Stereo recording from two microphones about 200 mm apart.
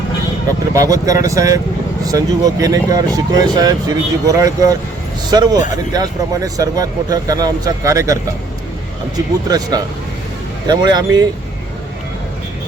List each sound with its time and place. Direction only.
0.7 s speech: 15° right (ahead or behind)